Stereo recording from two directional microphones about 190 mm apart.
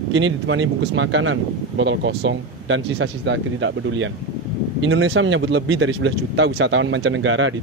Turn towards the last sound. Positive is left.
turn(degrees=-90)